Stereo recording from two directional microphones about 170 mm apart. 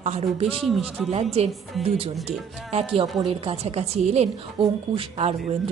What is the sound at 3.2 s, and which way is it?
A woman's voice, 35° right (ahead or behind).